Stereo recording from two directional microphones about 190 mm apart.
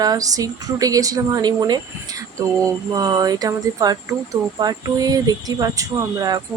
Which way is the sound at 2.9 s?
20° right (ahead or behind).